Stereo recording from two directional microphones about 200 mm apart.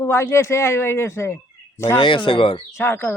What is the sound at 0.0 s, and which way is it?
A man's voice, 15° left (ahead or behind).